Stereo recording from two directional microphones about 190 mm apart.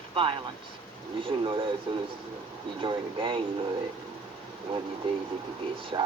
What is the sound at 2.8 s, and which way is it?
Speech, 25° right (ahead or behind).